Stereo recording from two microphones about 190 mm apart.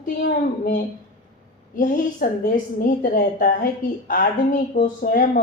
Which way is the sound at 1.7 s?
45° left (ahead or behind).